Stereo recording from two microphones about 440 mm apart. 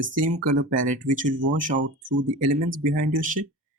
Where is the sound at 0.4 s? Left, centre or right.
Centre.